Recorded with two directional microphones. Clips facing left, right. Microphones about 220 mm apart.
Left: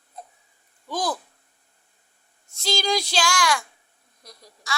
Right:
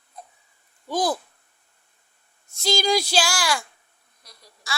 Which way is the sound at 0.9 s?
10° right (ahead or behind).